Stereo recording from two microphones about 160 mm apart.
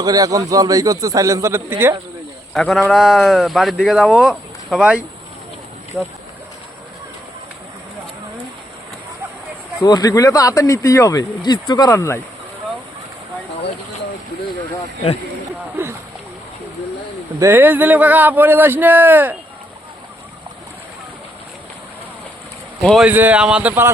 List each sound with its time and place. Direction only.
0.0 s speech: 25° right (ahead or behind)
2.5 s a man's voice: centre (ahead or behind)
9.8 s speech: 25° left (ahead or behind)
17.4 s a man's voice: 15° right (ahead or behind)
22.8 s speech: 5° left (ahead or behind)
23.0 s a man's voice: 10° right (ahead or behind)